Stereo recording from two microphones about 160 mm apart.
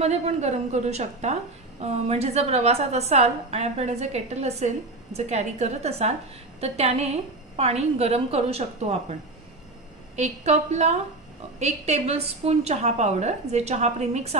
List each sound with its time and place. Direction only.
0.0 s a woman's voice: 45° right (ahead or behind)
10.1 s a woman's voice: 45° right (ahead or behind)